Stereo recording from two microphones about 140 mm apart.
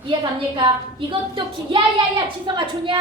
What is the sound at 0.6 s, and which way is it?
A woman's voice, 35° right (ahead or behind).